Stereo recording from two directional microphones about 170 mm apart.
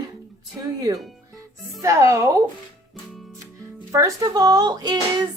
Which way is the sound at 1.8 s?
15° right (ahead or behind).